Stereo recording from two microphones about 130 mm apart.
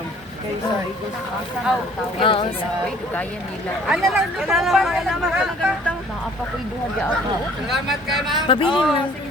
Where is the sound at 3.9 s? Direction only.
Centre (ahead or behind).